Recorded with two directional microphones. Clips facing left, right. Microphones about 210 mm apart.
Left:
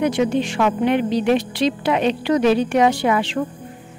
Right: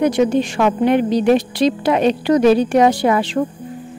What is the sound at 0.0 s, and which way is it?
Speech, 40° right (ahead or behind).